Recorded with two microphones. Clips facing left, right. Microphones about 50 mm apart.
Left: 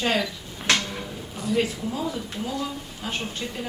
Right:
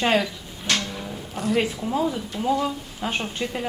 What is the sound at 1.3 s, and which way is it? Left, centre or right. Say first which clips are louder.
Speech: right 2 dB; right.